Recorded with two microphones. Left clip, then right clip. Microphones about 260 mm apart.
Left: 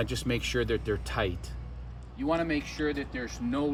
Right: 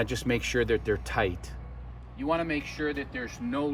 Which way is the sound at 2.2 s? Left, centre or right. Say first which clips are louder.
Even; centre.